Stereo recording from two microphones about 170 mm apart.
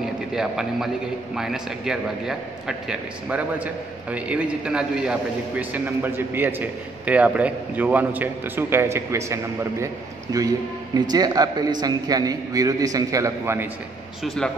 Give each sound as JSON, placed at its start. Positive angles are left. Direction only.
{"t": 0.3, "sound": "a man's voice", "side_deg": -5}
{"t": 11.0, "sound": "a man's voice", "side_deg": -25}
{"t": 14.2, "sound": "a man's voice", "side_deg": 5}